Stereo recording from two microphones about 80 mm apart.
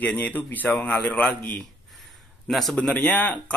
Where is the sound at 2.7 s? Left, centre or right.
Centre.